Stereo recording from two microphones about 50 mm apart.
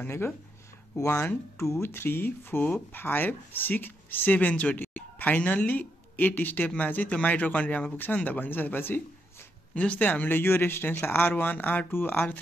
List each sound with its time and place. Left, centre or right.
1.6 s speech: left
9.8 s speech: left